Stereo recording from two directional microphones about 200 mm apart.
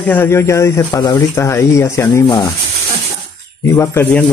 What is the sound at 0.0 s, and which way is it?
A man's voice, 10° left (ahead or behind).